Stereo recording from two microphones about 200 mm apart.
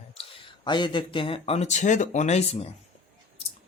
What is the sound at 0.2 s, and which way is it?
Speech, 25° left (ahead or behind).